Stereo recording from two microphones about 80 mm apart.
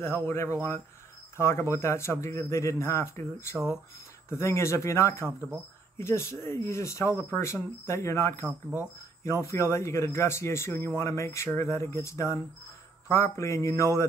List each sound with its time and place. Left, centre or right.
0.0 s speech: left
8.5 s speech: centre
9.2 s speech: left